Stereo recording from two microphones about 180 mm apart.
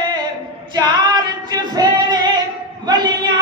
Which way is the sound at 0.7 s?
25° right (ahead or behind).